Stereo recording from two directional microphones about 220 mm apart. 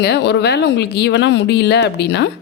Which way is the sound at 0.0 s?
50° left (ahead or behind).